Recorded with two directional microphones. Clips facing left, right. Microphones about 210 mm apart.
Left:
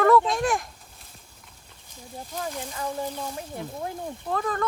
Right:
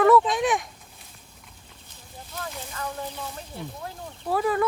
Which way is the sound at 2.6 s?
15° left (ahead or behind).